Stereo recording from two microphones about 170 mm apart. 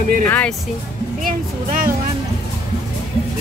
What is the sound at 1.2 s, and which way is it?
Music, 55° right (ahead or behind).